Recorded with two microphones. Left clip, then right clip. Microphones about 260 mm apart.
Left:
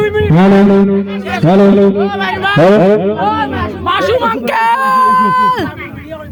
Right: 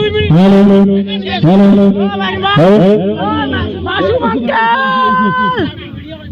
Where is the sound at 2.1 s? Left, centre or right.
Centre.